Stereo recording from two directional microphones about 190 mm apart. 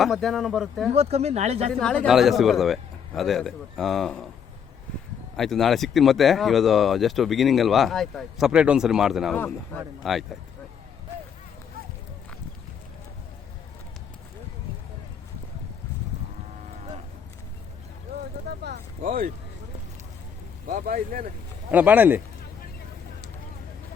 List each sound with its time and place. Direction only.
0.0 s speech: centre (ahead or behind)
0.9 s speech: 35° right (ahead or behind)
1.8 s speech: 5° left (ahead or behind)
5.4 s speech: centre (ahead or behind)
18.5 s a sound: 60° right (ahead or behind)
19.0 s speech: 50° right (ahead or behind)
20.7 s speech: 45° right (ahead or behind)
21.7 s speech: 10° right (ahead or behind)